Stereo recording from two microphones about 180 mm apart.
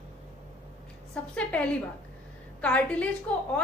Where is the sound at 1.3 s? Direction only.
5° left (ahead or behind).